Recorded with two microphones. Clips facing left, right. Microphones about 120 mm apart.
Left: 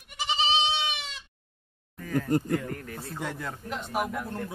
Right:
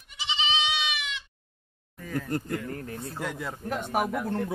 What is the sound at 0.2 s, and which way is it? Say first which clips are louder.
Goat: left 3 dB; 40° left (ahead or behind).